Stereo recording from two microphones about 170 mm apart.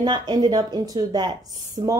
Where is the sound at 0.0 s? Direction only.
25° right (ahead or behind).